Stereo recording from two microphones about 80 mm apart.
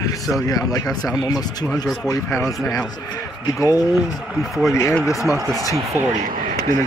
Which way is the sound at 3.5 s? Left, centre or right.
Left.